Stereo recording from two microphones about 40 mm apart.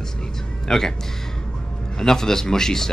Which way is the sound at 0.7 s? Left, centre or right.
Centre.